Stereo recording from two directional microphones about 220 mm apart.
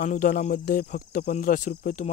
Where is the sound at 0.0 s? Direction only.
35° left (ahead or behind).